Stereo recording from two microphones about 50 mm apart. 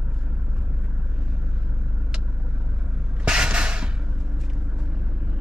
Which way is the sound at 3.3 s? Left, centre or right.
Centre.